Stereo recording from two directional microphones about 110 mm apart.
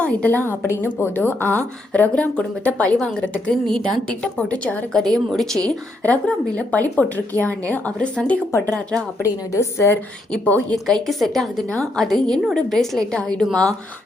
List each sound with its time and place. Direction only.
0.0 s a woman's voice: 10° left (ahead or behind)
9.5 s a woman's voice: 25° left (ahead or behind)
10.7 s a woman's voice: 5° left (ahead or behind)